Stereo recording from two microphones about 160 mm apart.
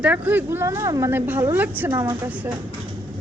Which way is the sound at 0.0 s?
10° right (ahead or behind).